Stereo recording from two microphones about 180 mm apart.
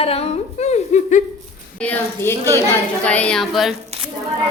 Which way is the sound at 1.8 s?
10° left (ahead or behind).